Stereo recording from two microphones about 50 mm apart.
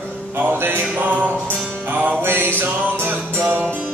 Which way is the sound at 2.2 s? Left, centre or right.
Right.